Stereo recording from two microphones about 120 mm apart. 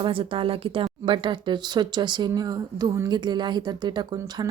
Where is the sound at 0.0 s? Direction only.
45° right (ahead or behind).